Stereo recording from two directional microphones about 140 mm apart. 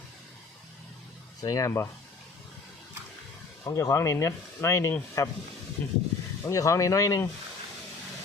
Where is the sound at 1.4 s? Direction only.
25° left (ahead or behind).